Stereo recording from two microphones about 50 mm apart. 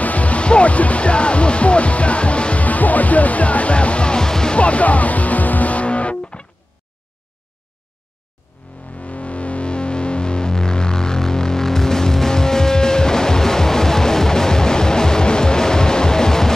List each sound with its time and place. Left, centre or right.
0.0 s speech: left; by 4.6 s centre
4.6 s music: left
8.9 s music: left; by 16.5 s centre